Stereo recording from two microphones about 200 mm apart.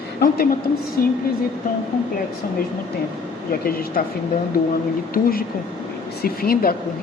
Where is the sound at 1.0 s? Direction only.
50° left (ahead or behind).